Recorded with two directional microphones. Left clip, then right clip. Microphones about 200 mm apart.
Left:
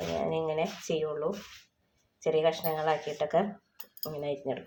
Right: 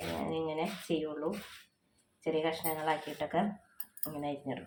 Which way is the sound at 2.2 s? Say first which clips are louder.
Left 6 dB; 40° left (ahead or behind).